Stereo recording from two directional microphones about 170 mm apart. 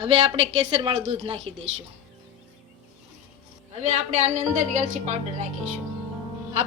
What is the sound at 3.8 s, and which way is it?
A woman's voice, 40° right (ahead or behind).